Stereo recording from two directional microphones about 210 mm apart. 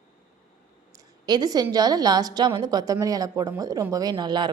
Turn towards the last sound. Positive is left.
turn(degrees=-20)  # may be behind; listen again after turning